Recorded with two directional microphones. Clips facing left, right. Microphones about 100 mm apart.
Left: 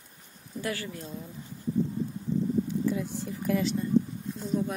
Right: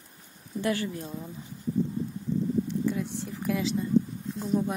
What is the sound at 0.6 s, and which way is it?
Speech, 25° right (ahead or behind).